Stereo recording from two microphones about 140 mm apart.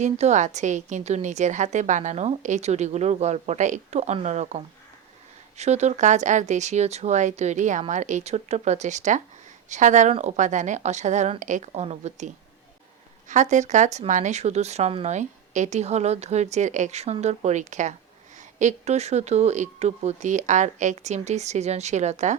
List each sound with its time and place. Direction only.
0.0 s a woman's voice: 55° right (ahead or behind)